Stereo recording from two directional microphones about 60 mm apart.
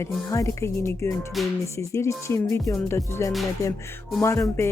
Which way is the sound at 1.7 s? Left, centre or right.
Left.